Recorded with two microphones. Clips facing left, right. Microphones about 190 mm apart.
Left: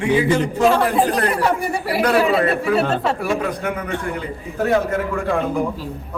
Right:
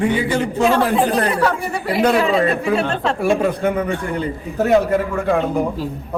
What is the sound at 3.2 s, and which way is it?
Speech, 25° right (ahead or behind).